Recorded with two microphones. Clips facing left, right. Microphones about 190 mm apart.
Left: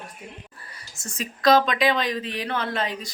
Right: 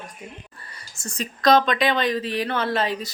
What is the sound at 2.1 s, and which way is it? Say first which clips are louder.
Speech: right 4 dB; 35° right (ahead or behind).